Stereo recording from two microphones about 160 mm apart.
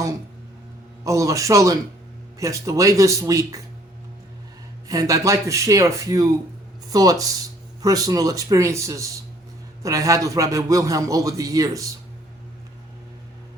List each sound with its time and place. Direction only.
1.0 s speech: 20° right (ahead or behind)
4.9 s speech: 20° right (ahead or behind)